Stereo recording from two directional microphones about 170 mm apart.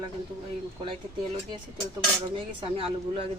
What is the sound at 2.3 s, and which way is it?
Speech, 30° right (ahead or behind).